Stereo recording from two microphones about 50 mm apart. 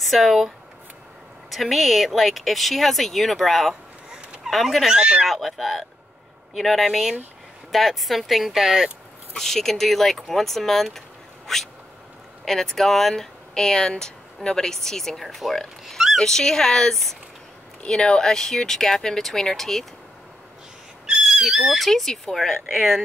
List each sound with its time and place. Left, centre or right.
0.0 s speech: centre
1.5 s speech: centre
4.9 s speech: centre
5.2 s speech: centre
9.3 s speech: centre
11.4 s a sound: centre
12.4 s speech: centre
16.2 s speech: centre
21.1 s speech: centre